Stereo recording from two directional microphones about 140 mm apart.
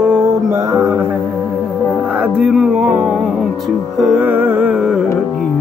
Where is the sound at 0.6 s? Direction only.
20° right (ahead or behind); by 5.1 s 5° right (ahead or behind).